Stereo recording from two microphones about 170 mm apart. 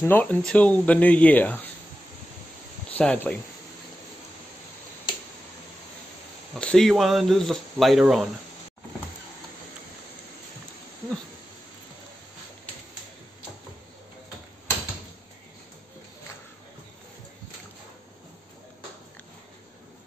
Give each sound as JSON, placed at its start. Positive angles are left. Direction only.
{"t": 0.0, "sound": "speech", "side_deg": 10}
{"t": 2.9, "sound": "speech", "side_deg": 5}
{"t": 6.5, "sound": "speech", "side_deg": 5}